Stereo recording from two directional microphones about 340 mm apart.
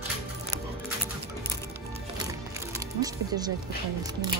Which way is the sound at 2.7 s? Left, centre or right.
Centre.